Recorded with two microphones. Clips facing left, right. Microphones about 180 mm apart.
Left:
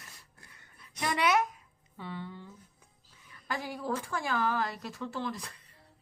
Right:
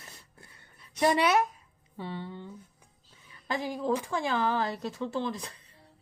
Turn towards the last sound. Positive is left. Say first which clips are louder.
# right 4 dB
turn(degrees=-25)  # may be behind; listen again after turning